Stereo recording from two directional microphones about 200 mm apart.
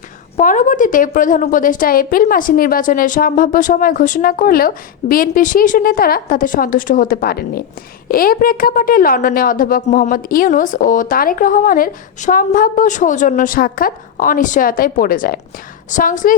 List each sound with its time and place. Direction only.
0.3 s a woman's voice: 40° left (ahead or behind)